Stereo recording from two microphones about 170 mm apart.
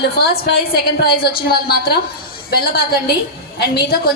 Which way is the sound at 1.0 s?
65° left (ahead or behind).